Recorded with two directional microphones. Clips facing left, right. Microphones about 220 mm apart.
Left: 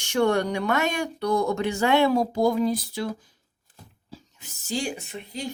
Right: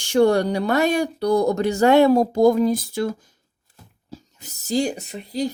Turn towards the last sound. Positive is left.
turn(degrees=-35)  # may be behind; listen again after turning